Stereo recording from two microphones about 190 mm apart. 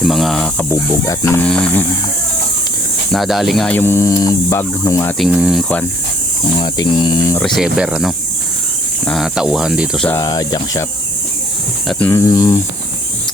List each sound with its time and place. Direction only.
0.0 s speech: centre (ahead or behind)
0.7 s speech: 15° left (ahead or behind)
3.1 s speech: centre (ahead or behind); by 5.1 s 15° left (ahead or behind)
5.2 s speech: 5° right (ahead or behind)
6.6 s speech: 25° left (ahead or behind)
7.3 s speech: centre (ahead or behind)
10.1 s speech: 20° left (ahead or behind)
11.9 s speech: 10° left (ahead or behind)